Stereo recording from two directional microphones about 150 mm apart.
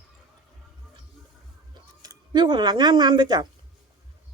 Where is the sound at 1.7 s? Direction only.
25° right (ahead or behind).